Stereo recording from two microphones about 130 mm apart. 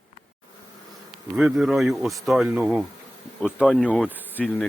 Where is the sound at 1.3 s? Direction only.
Centre (ahead or behind).